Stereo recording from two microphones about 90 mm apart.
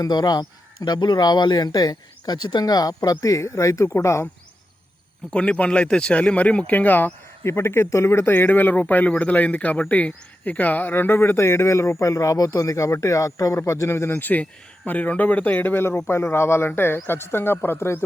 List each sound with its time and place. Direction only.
0.0 s speech: 50° left (ahead or behind); by 4.3 s 30° left (ahead or behind)
5.3 s a man's voice: 10° left (ahead or behind)